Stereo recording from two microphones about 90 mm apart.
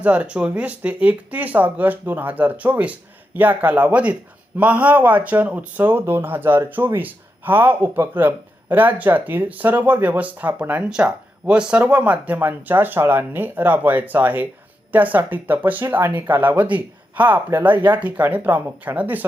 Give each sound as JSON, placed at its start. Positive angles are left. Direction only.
{"t": 0.0, "sound": "speech", "side_deg": -15}